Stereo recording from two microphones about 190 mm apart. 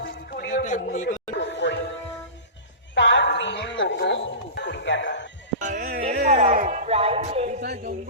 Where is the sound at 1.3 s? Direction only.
70° left (ahead or behind).